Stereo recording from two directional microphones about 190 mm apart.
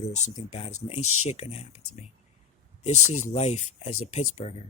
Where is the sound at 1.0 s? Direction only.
90° left.